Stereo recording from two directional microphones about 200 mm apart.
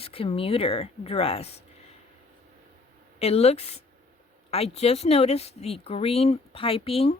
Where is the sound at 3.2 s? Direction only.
30° left (ahead or behind).